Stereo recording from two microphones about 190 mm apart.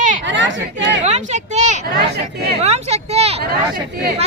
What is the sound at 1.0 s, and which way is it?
A child's voice, 40° right (ahead or behind).